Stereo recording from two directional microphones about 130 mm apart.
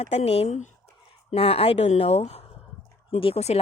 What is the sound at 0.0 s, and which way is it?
Speech, 55° left (ahead or behind).